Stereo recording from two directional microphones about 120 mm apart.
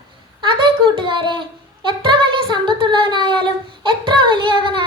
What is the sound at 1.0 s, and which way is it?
Speech, 40° right (ahead or behind).